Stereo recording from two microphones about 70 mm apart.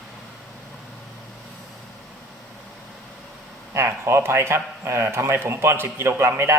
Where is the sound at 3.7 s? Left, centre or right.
Right.